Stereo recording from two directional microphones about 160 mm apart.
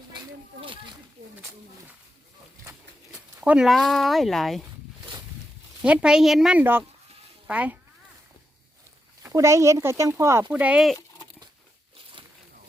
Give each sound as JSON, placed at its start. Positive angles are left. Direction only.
{"t": 0.6, "sound": "snake", "side_deg": -30}
{"t": 3.1, "sound": "speech", "side_deg": -5}
{"t": 5.8, "sound": "a woman's voice", "side_deg": -5}
{"t": 9.2, "sound": "speech", "side_deg": -20}
{"t": 10.5, "sound": "a woman's voice", "side_deg": -10}
{"t": 12.2, "sound": "a sound", "side_deg": -30}